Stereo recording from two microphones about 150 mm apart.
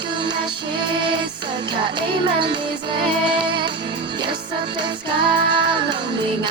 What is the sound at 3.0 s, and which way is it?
Music, 30° right (ahead or behind).